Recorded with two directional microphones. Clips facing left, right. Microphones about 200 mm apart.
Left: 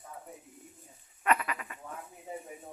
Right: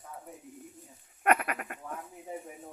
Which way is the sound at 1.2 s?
55° right (ahead or behind).